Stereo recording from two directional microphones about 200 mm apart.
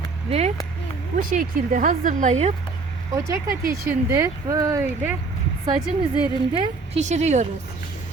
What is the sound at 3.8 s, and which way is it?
Speech, 15° right (ahead or behind).